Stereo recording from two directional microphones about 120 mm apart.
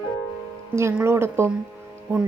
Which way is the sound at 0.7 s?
20° right (ahead or behind).